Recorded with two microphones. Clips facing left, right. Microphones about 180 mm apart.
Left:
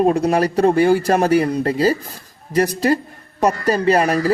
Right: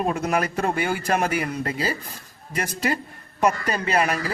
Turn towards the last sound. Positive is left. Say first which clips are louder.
# left 8 dB
turn(degrees=35)  # may be behind; listen again after turning